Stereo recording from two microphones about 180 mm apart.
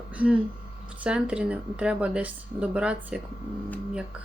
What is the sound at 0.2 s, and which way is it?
A woman's voice, 10° right (ahead or behind).